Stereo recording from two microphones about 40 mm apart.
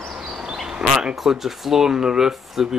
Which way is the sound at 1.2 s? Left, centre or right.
Centre.